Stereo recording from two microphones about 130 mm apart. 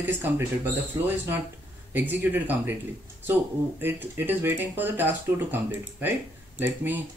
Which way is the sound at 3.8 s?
15° right (ahead or behind).